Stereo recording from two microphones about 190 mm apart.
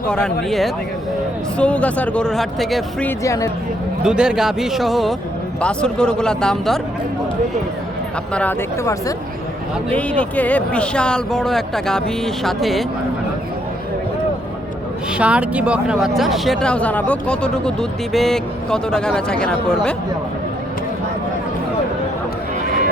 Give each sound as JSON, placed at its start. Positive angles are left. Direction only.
{"t": 0.1, "sound": "speech", "side_deg": 5}
{"t": 3.1, "sound": "speech", "side_deg": 15}
{"t": 4.0, "sound": "speech", "side_deg": -5}
{"t": 8.3, "sound": "speech", "side_deg": 10}
{"t": 15.2, "sound": "speech", "side_deg": -5}